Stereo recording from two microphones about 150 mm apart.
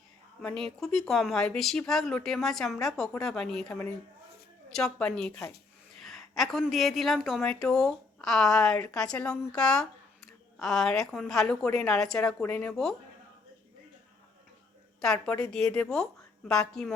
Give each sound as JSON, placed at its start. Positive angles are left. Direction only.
{"t": 0.4, "sound": "a woman's voice", "side_deg": 5}
{"t": 15.0, "sound": "a woman's voice", "side_deg": 5}